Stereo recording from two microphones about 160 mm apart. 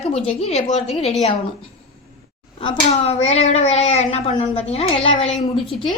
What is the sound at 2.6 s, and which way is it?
Speech, 35° left (ahead or behind).